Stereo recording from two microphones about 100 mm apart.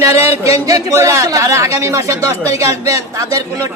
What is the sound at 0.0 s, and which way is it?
A man's voice, 25° right (ahead or behind).